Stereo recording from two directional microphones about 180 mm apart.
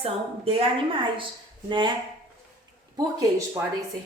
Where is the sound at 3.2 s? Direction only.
15° right (ahead or behind).